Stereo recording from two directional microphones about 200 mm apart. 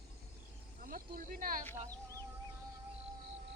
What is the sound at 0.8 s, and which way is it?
Speech, 45° right (ahead or behind).